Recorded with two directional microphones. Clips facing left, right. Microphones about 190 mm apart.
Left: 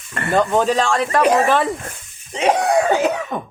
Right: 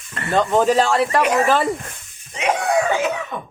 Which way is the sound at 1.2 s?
35° left (ahead or behind).